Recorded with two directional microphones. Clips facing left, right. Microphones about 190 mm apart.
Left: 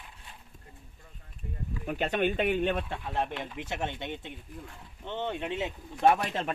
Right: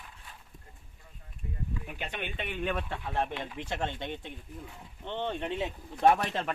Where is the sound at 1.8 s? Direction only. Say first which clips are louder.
Left 16 dB; 45° left (ahead or behind).